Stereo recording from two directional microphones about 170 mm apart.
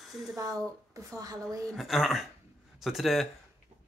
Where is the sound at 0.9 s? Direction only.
20° right (ahead or behind).